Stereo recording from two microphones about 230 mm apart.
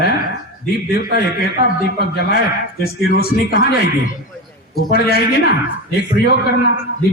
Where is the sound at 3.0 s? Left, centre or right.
Left.